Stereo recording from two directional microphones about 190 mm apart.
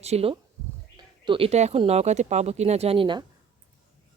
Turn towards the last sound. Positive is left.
turn(degrees=-25)  # may be behind; listen again after turning